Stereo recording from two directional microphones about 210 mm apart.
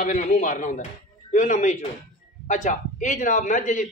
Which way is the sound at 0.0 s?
35° left (ahead or behind).